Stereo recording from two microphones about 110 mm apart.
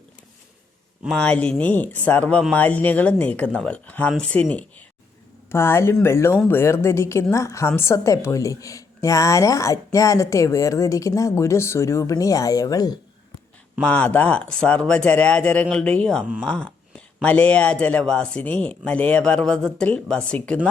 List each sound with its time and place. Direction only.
1.0 s speech: 10° left (ahead or behind)
5.5 s speech: 20° left (ahead or behind)
13.8 s speech: 10° left (ahead or behind)